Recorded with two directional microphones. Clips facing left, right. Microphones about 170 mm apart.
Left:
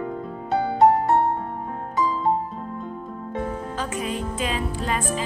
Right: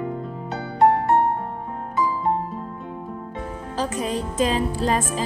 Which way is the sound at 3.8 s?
35° right (ahead or behind).